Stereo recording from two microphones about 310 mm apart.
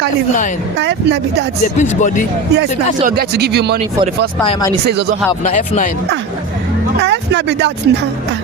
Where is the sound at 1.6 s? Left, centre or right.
Left.